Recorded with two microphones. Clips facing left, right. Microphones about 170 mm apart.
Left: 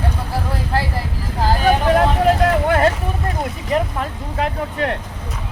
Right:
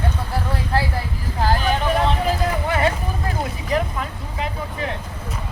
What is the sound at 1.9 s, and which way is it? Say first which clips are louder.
Vehicle: left 5 dB; 65° left (ahead or behind).